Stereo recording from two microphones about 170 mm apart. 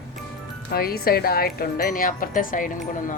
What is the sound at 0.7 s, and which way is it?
A woman's voice, 65° left (ahead or behind).